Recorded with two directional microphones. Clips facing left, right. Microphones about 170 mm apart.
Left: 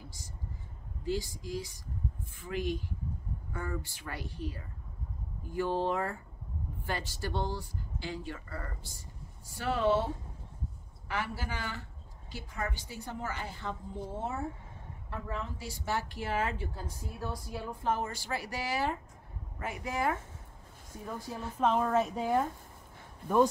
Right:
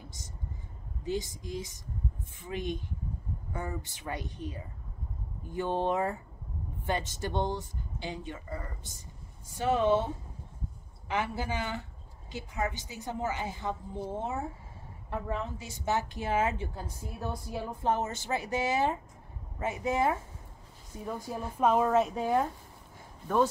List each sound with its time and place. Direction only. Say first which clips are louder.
1.0 s a woman's voice: right 1 dB; 20° right (ahead or behind)
21.5 s speech: right 3 dB; 5° right (ahead or behind)
23.2 s speech: left 1 dB; 10° left (ahead or behind)